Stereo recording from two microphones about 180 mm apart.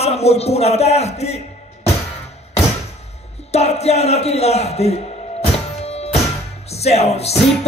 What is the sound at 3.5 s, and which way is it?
Speech, 35° left (ahead or behind).